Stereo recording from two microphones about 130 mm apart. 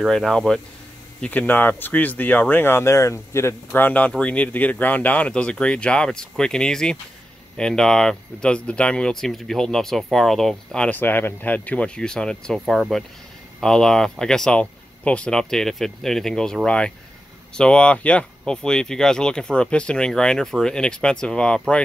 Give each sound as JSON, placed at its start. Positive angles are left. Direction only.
{"t": 0.0, "sound": "speech", "side_deg": 0}